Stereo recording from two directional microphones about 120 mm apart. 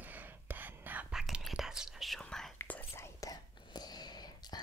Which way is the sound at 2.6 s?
15° left (ahead or behind).